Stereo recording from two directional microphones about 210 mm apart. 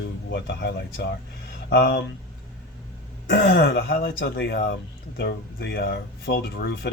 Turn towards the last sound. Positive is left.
turn(degrees=50)  # may be behind; listen again after turning